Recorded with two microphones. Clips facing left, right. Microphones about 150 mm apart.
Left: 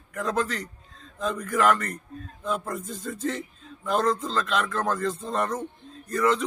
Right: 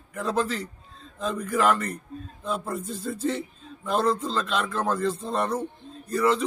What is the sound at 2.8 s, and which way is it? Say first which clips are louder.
Speech: right 2 dB; 35° right (ahead or behind).